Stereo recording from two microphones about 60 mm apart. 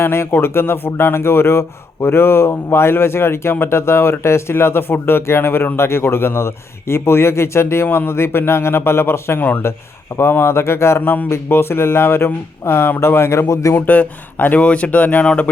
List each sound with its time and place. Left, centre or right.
0.0 s speech: left
13.5 s speech: left
13.7 s speech: left